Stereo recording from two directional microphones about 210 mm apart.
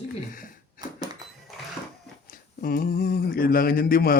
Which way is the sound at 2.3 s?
45° left (ahead or behind).